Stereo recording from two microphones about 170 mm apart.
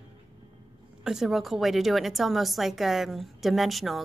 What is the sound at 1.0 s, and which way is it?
A woman's voice, centre (ahead or behind).